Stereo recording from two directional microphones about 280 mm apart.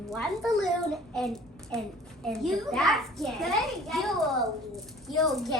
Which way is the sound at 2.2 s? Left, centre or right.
Centre.